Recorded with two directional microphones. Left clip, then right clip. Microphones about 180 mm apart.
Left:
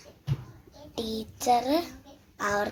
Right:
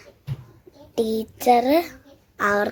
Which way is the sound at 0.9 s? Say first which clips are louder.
Right 10 dB; 50° right (ahead or behind).